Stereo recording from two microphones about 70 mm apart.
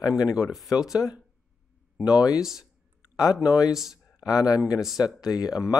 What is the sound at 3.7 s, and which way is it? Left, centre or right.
Speech, centre.